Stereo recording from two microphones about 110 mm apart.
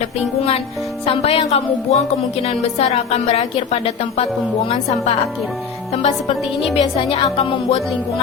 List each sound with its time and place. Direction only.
1.0 s a woman's voice: 60° left (ahead or behind); by 5.1 s 80° left
6.0 s a woman's voice: 65° left (ahead or behind)